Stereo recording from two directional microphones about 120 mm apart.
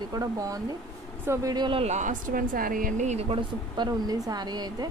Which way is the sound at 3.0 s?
75° right (ahead or behind).